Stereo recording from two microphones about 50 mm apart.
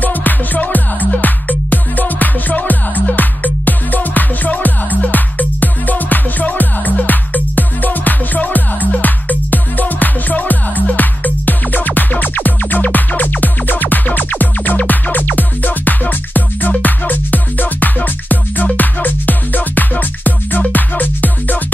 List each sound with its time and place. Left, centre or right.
0.0 s music: left